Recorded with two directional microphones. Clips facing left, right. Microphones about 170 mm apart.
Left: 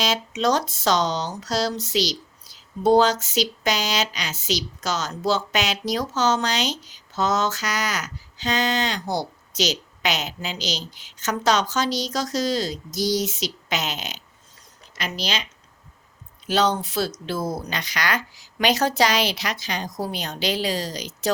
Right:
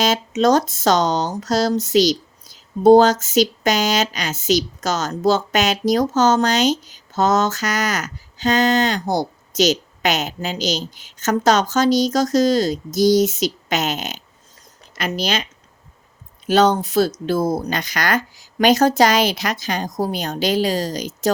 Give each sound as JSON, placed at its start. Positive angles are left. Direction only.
{"t": 0.0, "sound": "speech", "side_deg": -45}
{"t": 16.5, "sound": "speech", "side_deg": -50}